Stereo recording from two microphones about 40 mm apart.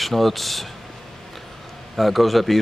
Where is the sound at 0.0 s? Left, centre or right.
Centre.